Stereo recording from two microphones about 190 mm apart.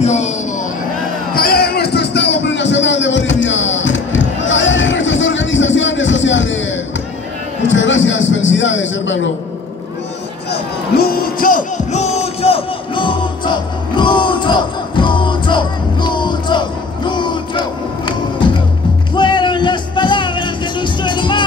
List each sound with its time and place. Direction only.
0.0 s speech: 35° left (ahead or behind)
1.3 s basketball bounce: 55° left (ahead or behind); by 6.6 s 75° left (ahead or behind)
7.6 s a sound: 75° left (ahead or behind)
11.0 s battle cry: 50° left (ahead or behind); by 18.5 s 25° left (ahead or behind)
19.1 s music: 25° left (ahead or behind)